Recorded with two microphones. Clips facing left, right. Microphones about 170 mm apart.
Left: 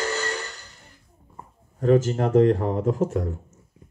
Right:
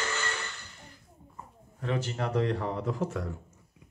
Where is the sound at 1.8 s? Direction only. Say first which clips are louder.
Left 12 dB; 45° left (ahead or behind).